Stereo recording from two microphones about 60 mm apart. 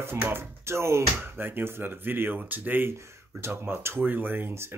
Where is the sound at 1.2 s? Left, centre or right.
Right.